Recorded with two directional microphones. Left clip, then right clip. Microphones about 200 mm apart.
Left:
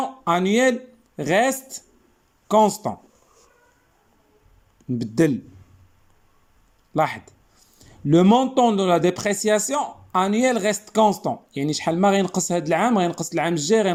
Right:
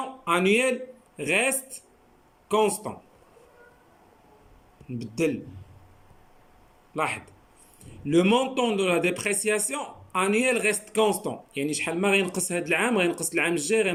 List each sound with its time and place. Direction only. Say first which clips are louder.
0.3 s a man's voice: left 3 dB; 30° left (ahead or behind)
6.9 s a man's voice: left 6 dB; 30° left (ahead or behind)